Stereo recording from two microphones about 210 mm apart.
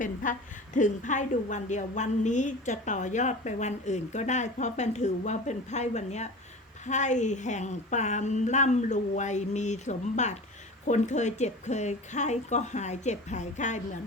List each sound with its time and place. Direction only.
0.0 s a woman's voice: 40° left (ahead or behind)